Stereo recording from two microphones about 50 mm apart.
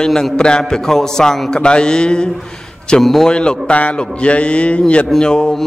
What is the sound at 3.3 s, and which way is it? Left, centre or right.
A man's voice, centre.